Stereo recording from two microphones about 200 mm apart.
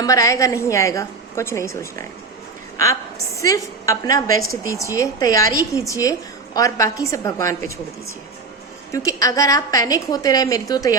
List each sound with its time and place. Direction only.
0.0 s a woman's voice: 15° left (ahead or behind)
8.9 s a woman's voice: 15° left (ahead or behind)